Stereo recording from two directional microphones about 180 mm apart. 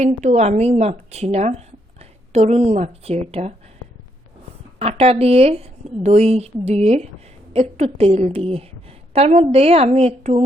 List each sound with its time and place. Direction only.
0.0 s a woman's voice: 40° right (ahead or behind)
4.8 s a woman's voice: 35° right (ahead or behind)